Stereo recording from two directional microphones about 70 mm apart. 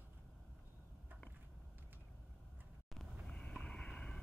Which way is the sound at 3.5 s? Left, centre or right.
Centre.